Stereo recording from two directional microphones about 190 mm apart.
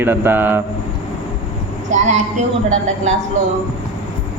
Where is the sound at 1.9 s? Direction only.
35° right (ahead or behind).